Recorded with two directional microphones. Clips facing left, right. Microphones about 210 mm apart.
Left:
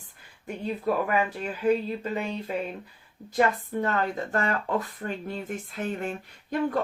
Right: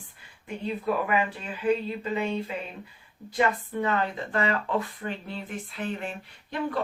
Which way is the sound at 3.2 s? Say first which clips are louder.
Left 2 dB; 45° left (ahead or behind).